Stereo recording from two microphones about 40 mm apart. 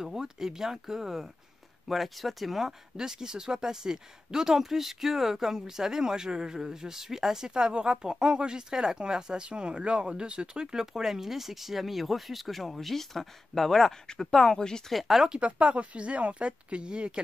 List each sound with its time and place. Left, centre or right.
0.0 s speech: centre
3.0 s speech: centre
14.9 s speech: centre
15.4 s speech: right